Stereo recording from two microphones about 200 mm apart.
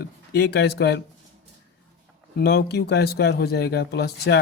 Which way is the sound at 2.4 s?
55° left (ahead or behind).